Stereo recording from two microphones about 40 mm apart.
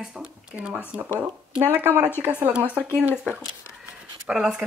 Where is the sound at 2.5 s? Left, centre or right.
Right.